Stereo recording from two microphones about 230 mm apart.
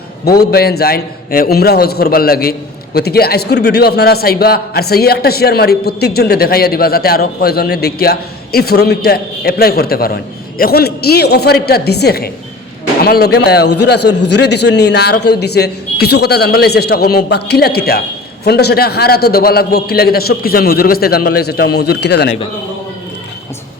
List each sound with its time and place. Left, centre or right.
0.3 s a man's voice: left